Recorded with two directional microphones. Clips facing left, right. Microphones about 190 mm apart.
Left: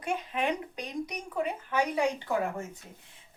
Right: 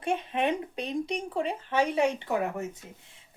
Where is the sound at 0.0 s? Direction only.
25° right (ahead or behind).